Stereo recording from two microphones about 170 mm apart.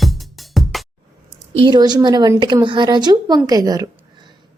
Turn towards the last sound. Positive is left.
turn(degrees=-20)  # may be behind; listen again after turning